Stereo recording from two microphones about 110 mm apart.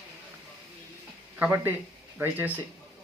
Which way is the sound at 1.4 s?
20° right (ahead or behind).